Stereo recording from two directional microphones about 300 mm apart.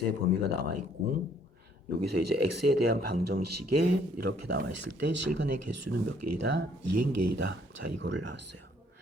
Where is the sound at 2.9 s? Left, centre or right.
Right.